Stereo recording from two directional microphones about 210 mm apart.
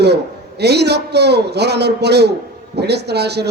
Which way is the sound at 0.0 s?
50° right (ahead or behind).